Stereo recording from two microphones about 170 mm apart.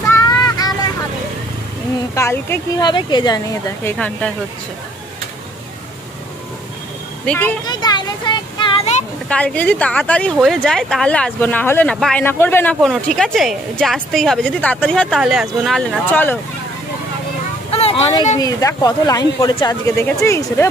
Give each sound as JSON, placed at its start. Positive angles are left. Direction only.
{"t": 0.1, "sound": "vehicle", "side_deg": 20}
{"t": 2.1, "sound": "speech", "side_deg": 15}
{"t": 3.8, "sound": "speech", "side_deg": 5}
{"t": 7.2, "sound": "speech", "side_deg": 10}
{"t": 7.6, "sound": "a sound", "side_deg": 25}
{"t": 9.3, "sound": "speech", "side_deg": 10}
{"t": 12.8, "sound": "a woman's voice", "side_deg": 0}
{"t": 16.1, "sound": "speech", "side_deg": 10}
{"t": 17.6, "sound": "vehicle", "side_deg": 35}
{"t": 18.4, "sound": "speech", "side_deg": 20}